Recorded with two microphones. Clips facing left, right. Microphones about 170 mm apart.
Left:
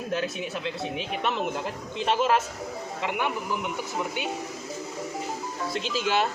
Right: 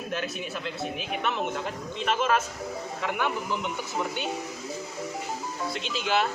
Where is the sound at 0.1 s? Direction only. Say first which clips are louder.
Left 3 dB; 30° left (ahead or behind).